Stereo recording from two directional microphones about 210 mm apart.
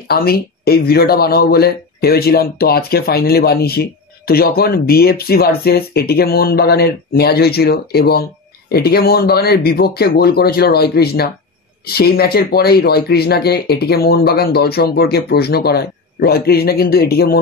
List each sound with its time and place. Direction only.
0.1 s speech: 45° left (ahead or behind)